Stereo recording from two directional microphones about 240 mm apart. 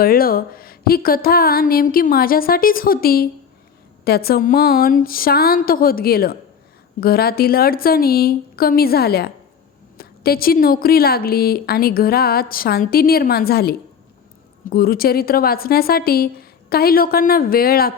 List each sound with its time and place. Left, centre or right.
0.0 s a woman's voice: left